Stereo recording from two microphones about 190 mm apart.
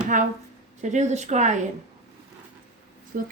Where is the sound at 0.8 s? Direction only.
40° right (ahead or behind).